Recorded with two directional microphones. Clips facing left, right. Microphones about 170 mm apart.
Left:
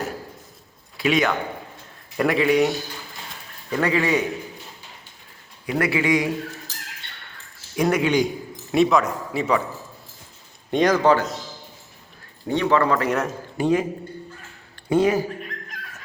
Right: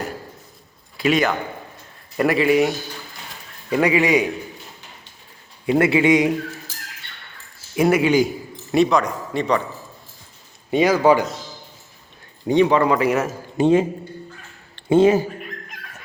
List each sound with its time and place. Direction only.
0.9 s a man's voice: centre (ahead or behind)
3.7 s speech: 15° right (ahead or behind)
5.6 s a man's voice: 25° right (ahead or behind)
7.8 s speech: 5° right (ahead or behind)
10.7 s speech: 5° right (ahead or behind)
12.5 s speech: 15° right (ahead or behind)
13.6 s a man's voice: 25° right (ahead or behind)